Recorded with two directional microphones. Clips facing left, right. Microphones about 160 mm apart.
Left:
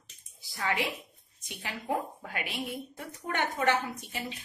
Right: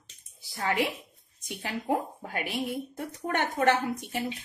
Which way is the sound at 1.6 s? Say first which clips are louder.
Right 4 dB; 45° right (ahead or behind).